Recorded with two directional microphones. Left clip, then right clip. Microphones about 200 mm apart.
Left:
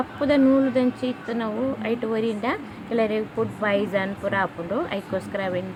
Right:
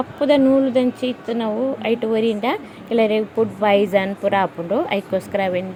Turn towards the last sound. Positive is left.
turn(degrees=-20)  # may be behind; listen again after turning